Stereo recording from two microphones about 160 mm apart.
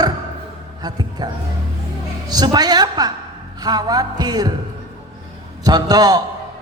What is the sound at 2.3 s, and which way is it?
Mantra, 25° right (ahead or behind).